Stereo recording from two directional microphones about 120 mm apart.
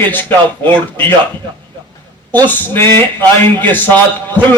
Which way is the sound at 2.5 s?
15° left (ahead or behind).